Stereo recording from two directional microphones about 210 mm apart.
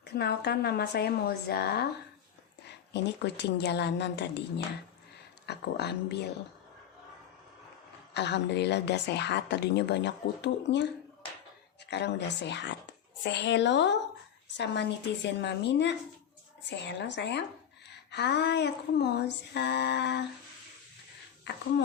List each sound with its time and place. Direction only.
0.0 s a woman's voice: 50° left (ahead or behind)
2.9 s a woman's voice: 55° left (ahead or behind)
8.1 s a woman's voice: 55° left (ahead or behind)
11.9 s a woman's voice: 55° left (ahead or behind)
21.5 s a woman's voice: 55° left (ahead or behind)